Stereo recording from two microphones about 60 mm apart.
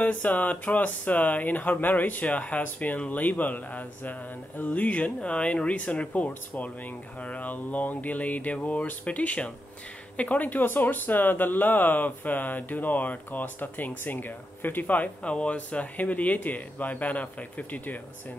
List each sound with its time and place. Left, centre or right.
0.0 s speech: left